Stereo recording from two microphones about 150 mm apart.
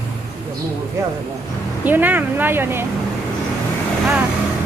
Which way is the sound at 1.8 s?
10° right (ahead or behind).